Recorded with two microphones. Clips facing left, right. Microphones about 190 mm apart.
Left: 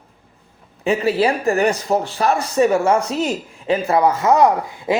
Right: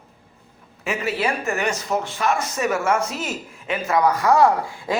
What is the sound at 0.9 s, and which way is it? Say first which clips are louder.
Speech: left 7 dB; 35° left (ahead or behind).